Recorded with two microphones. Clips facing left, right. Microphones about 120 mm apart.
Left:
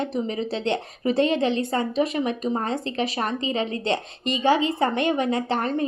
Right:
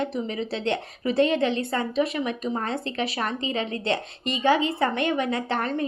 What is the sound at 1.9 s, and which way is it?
Speech, 40° left (ahead or behind).